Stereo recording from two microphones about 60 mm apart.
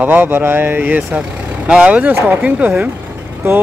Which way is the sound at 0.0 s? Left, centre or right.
Right.